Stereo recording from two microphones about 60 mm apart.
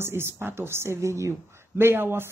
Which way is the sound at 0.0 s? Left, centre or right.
Right.